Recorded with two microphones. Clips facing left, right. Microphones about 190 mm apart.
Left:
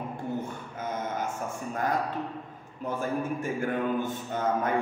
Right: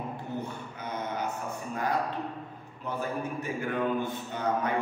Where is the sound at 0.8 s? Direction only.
45° left (ahead or behind).